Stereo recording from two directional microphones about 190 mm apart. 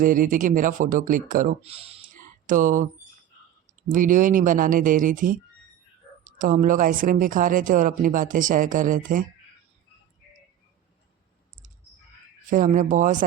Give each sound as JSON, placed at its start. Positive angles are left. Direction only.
{"t": 0.0, "sound": "speech", "side_deg": -45}
{"t": 1.6, "sound": "speech", "side_deg": -30}
{"t": 2.1, "sound": "a sound", "side_deg": -45}
{"t": 3.9, "sound": "speech", "side_deg": -45}
{"t": 6.4, "sound": "speech", "side_deg": -45}
{"t": 12.5, "sound": "speech", "side_deg": -45}